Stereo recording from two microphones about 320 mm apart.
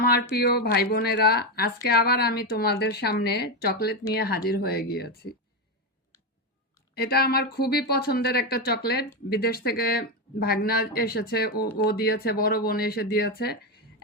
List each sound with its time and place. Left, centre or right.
0.0 s a woman's voice: left
6.9 s a woman's voice: left